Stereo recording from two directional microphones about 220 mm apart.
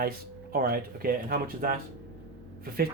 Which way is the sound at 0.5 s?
40° right (ahead or behind).